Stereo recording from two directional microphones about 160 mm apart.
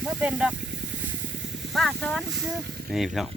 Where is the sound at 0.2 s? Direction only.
5° right (ahead or behind).